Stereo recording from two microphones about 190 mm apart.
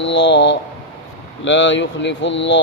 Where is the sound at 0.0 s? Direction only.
70° left (ahead or behind).